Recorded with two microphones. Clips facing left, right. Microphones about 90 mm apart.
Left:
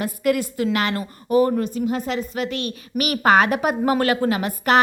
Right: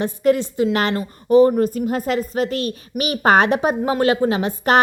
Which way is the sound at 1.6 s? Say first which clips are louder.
Right 3 dB; 45° right (ahead or behind).